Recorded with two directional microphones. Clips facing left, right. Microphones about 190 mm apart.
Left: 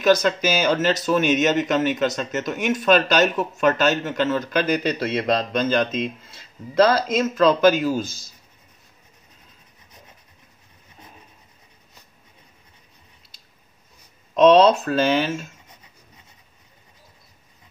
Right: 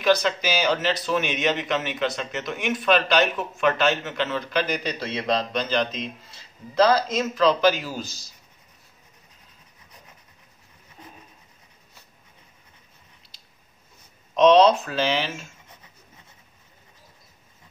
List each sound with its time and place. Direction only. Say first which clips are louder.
0.0 s speech: left 3 dB; 45° left (ahead or behind)
14.3 s speech: left 2 dB; 50° left (ahead or behind)